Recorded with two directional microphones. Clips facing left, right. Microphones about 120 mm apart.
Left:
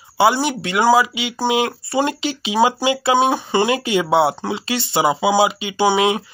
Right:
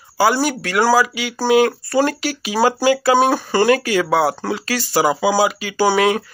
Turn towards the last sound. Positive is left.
turn(degrees=20)  # may be behind; listen again after turning